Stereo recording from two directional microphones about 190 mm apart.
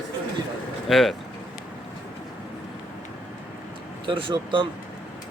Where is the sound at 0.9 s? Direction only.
Centre (ahead or behind).